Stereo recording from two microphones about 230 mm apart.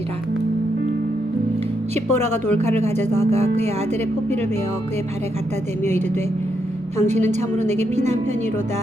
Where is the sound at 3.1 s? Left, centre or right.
Right.